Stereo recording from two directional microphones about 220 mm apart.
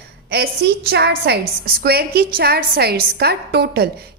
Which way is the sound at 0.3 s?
50° right (ahead or behind).